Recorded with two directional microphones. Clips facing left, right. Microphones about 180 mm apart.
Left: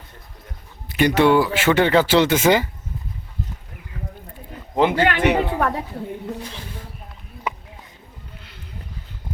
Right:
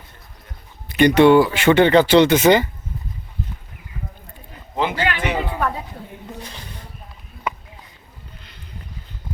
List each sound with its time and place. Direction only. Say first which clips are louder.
0.9 s speech: right 4 dB; 5° left (ahead or behind)
4.8 s speech: left 5 dB; 55° left (ahead or behind)
6.4 s a sound: left 3 dB; 5° left (ahead or behind)